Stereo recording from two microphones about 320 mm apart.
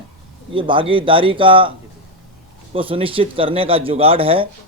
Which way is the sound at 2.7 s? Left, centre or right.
Centre.